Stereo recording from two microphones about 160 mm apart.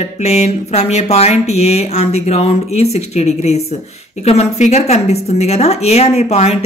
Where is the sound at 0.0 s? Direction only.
45° left (ahead or behind).